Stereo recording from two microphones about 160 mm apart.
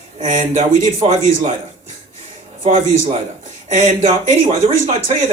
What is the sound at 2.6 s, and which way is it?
Speech, 50° right (ahead or behind).